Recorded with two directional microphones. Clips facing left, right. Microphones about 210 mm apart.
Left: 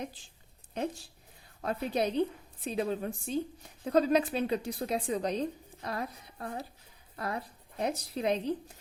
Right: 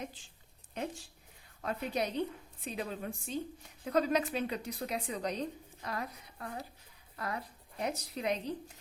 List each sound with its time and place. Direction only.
0.7 s a woman's voice: 35° left (ahead or behind)